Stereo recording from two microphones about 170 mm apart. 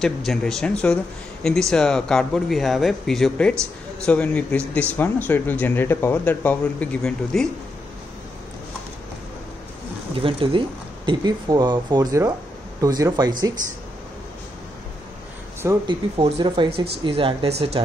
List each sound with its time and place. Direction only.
0.0 s speech: 5° left (ahead or behind)
10.1 s speech: 30° right (ahead or behind)
15.9 s speech: 35° right (ahead or behind)